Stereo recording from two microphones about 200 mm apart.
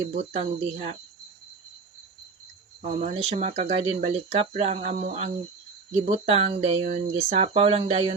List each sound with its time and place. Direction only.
0.0 s speech: 30° right (ahead or behind)
2.8 s speech: 35° right (ahead or behind)
6.3 s speech: 30° right (ahead or behind)
6.9 s speech: 45° right (ahead or behind)
7.4 s speech: 30° right (ahead or behind)